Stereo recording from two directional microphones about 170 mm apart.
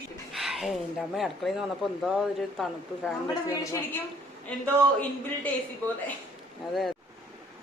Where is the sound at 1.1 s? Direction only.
Centre (ahead or behind).